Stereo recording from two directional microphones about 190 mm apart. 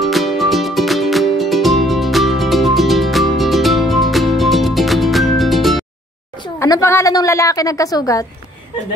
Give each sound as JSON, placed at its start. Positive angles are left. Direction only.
{"t": 0.0, "sound": "music", "side_deg": 0}
{"t": 6.4, "sound": "a woman's voice", "side_deg": 15}